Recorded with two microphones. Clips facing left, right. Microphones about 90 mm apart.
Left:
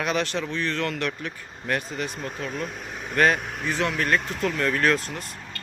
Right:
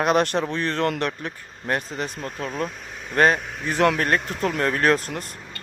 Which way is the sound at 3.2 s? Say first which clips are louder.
Right 2 dB; 30° right (ahead or behind).